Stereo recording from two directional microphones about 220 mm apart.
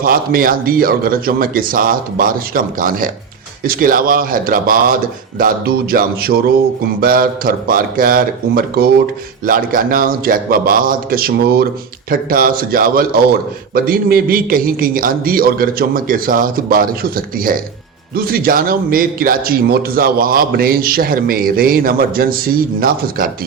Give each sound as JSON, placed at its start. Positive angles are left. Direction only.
{"t": 0.0, "sound": "a man's voice", "side_deg": -40}